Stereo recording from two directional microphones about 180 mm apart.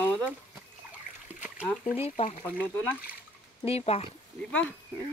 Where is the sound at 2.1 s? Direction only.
35° left (ahead or behind).